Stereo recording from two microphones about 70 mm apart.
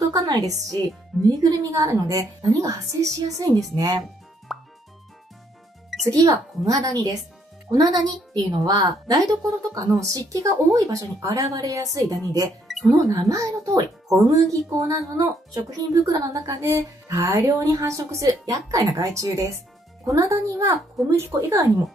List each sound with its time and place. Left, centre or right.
0.0 s a woman's voice: right
4.5 s music: centre
6.0 s a woman's voice: right
12.6 s music: centre
12.9 s a woman's voice: right
16.6 s a woman's voice: right
21.2 s a woman's voice: right